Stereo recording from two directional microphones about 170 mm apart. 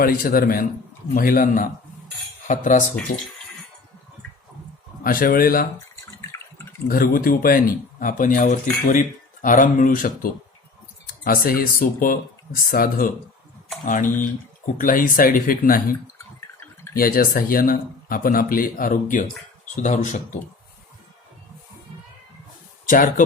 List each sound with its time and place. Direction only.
0.0 s speech: 60° left (ahead or behind)
3.1 s speech: 65° left (ahead or behind)
5.0 s speech: 55° left (ahead or behind)
6.1 s drip: 15° left (ahead or behind)
6.8 s speech: 55° left (ahead or behind)
22.9 s speech: 50° left (ahead or behind)